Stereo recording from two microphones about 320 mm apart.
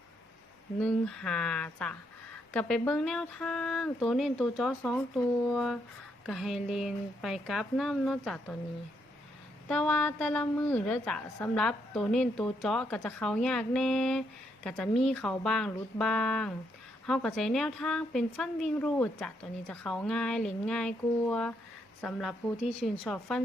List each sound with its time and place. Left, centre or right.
0.8 s a woman's voice: centre
9.6 s a woman's voice: centre